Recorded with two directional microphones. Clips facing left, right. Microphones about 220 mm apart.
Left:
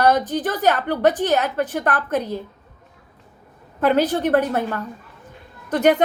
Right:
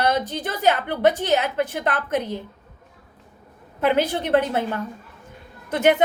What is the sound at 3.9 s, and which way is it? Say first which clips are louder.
Speech: left 2 dB; 10° right (ahead or behind).